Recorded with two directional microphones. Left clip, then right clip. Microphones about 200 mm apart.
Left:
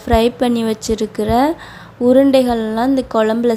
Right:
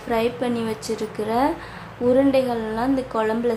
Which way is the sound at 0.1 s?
40° left (ahead or behind).